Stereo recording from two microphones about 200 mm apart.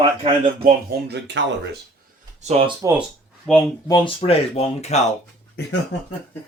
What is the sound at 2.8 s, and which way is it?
Speech, 10° right (ahead or behind).